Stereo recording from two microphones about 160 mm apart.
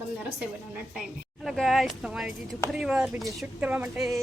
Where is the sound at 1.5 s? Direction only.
Centre (ahead or behind).